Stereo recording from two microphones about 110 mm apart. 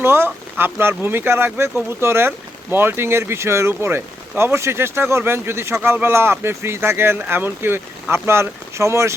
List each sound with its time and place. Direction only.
0.0 s speech: 20° right (ahead or behind)